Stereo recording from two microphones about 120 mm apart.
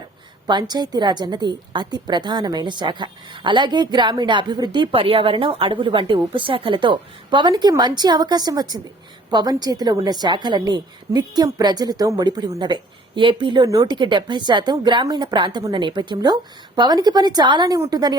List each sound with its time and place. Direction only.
0.4 s a woman's voice: 35° right (ahead or behind)